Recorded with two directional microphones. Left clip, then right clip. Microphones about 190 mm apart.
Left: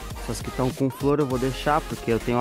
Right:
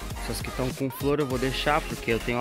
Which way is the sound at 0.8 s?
15° left (ahead or behind).